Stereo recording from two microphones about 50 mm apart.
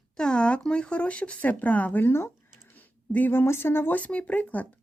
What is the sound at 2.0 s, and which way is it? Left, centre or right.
Speech, left.